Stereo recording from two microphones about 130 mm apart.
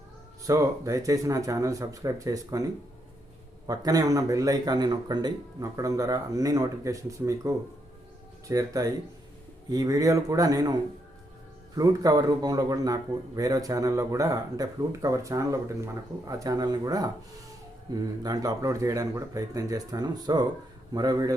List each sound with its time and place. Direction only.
0.4 s speech: 25° right (ahead or behind)
3.7 s speech: 30° right (ahead or behind)
11.8 s speech: 30° right (ahead or behind)